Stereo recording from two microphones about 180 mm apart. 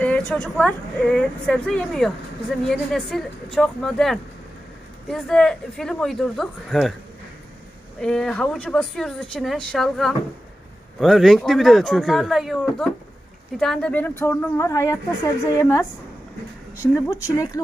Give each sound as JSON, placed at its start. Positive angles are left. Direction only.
{"t": 0.0, "sound": "a woman's voice", "side_deg": 5}
{"t": 7.9, "sound": "a woman's voice", "side_deg": 5}